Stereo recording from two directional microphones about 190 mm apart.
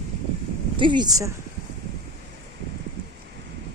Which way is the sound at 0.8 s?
25° right (ahead or behind).